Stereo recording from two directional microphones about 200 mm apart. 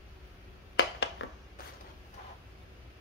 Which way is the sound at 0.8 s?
60° left (ahead or behind).